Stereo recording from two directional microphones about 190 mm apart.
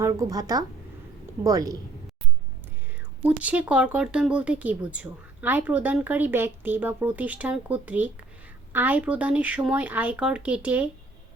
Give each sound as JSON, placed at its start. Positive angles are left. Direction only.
{"t": 0.0, "sound": "a woman's voice", "side_deg": -20}
{"t": 3.2, "sound": "speech", "side_deg": -5}